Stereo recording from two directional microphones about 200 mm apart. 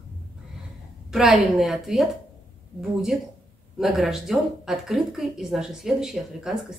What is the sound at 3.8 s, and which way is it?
A woman's voice, centre (ahead or behind).